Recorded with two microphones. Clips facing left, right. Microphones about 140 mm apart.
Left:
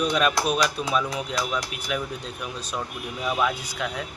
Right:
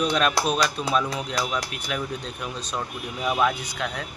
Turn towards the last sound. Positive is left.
turn(degrees=5)  # may be behind; listen again after turning